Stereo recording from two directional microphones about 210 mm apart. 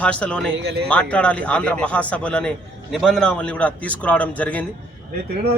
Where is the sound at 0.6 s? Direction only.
50° right (ahead or behind).